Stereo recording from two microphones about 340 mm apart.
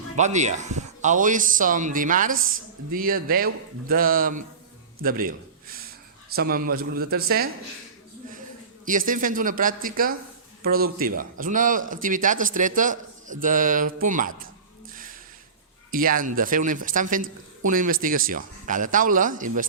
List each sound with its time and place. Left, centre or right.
0.2 s speech: right
5.0 s a sound: right
6.3 s speech: right
8.8 s speech: right
14.9 s a sound: right
15.9 s speech: right